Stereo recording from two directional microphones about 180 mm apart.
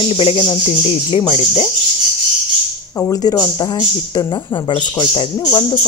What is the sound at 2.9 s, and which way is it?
A woman's voice, 15° left (ahead or behind).